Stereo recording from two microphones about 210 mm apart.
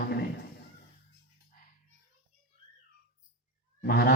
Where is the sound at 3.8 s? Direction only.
50° left (ahead or behind).